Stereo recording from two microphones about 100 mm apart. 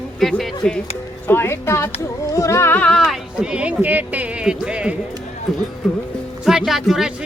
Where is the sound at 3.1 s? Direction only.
5° right (ahead or behind).